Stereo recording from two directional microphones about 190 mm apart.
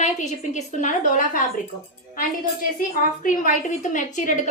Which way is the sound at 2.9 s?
45° left (ahead or behind).